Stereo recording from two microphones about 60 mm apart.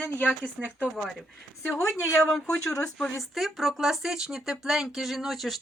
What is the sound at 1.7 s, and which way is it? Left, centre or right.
Speech, left.